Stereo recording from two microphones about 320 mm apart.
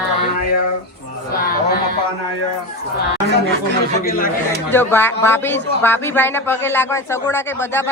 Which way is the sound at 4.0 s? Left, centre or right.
Left.